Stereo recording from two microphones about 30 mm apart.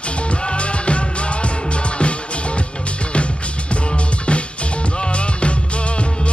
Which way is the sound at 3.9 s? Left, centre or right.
Left.